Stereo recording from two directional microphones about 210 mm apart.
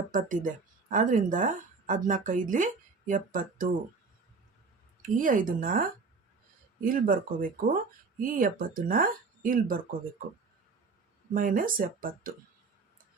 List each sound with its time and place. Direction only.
0.2 s speech: 40° right (ahead or behind)
5.0 s speech: 40° right (ahead or behind)
6.8 s speech: 40° right (ahead or behind)
11.3 s speech: 40° right (ahead or behind)